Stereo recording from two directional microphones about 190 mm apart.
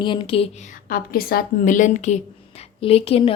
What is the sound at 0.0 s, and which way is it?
A woman's voice, 25° left (ahead or behind).